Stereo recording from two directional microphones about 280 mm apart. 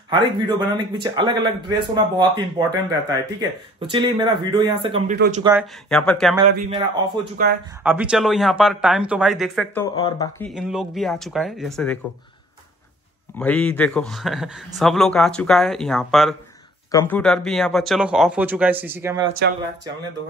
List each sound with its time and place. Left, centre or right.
0.1 s speech: centre
5.1 s speech: right
5.4 s speech: centre
7.4 s speech: right
7.8 s speech: centre
9.9 s speech: centre
10.5 s speech: centre
13.4 s speech: centre
19.2 s speech: right